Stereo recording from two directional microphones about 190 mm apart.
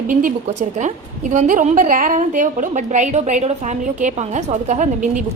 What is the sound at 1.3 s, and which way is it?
A woman's voice, 40° right (ahead or behind).